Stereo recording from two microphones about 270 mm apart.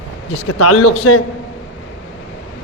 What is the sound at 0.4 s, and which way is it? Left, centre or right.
Speech, left.